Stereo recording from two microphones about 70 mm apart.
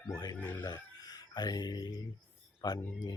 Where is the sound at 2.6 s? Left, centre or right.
Left.